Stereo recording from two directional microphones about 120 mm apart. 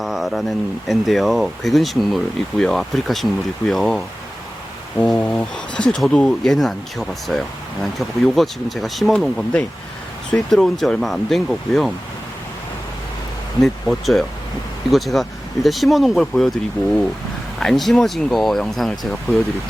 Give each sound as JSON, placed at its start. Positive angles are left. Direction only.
{"t": 0.0, "sound": "speech", "side_deg": 0}
{"t": 5.0, "sound": "speech", "side_deg": 15}
{"t": 5.3, "sound": "speech", "side_deg": 5}
{"t": 13.6, "sound": "speech", "side_deg": 0}
{"t": 17.6, "sound": "speech", "side_deg": 5}